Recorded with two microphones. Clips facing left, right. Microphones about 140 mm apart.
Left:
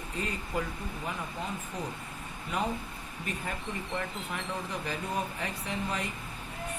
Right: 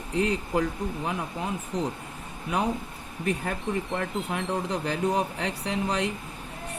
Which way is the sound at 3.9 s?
80° right.